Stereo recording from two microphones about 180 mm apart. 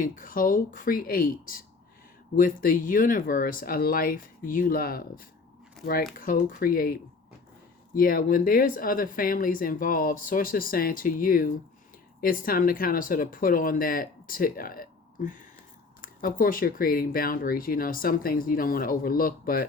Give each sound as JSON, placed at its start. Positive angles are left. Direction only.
{"t": 0.0, "sound": "speech", "side_deg": 50}